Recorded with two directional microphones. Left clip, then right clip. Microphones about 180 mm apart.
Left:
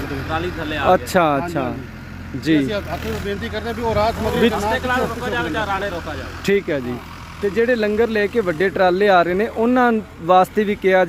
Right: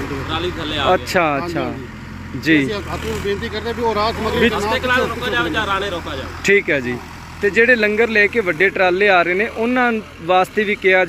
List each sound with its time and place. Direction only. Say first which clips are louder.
0.9 s speech: left 1 dB; 30° left (ahead or behind)